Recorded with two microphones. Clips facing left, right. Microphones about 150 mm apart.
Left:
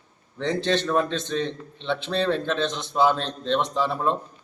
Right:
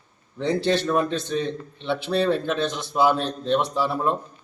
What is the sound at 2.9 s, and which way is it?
Speech, 10° right (ahead or behind).